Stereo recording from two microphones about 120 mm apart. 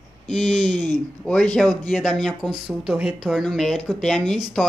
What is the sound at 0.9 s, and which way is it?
Speech, 10° left (ahead or behind).